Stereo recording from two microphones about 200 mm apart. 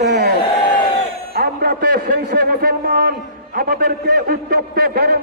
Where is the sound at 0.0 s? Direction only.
55° right (ahead or behind).